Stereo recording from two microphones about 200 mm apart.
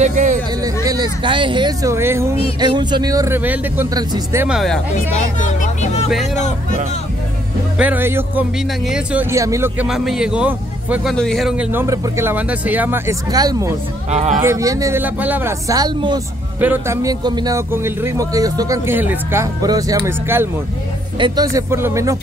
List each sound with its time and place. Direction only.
0.0 s speech: 40° right (ahead or behind)
0.8 s a man's voice: 20° right (ahead or behind)
4.6 s speech: centre (ahead or behind)
5.1 s speech: 40° left (ahead or behind)
7.8 s a man's voice: 10° right (ahead or behind)
14.1 s speech: 35° right (ahead or behind)
14.4 s a man's voice: 15° right (ahead or behind)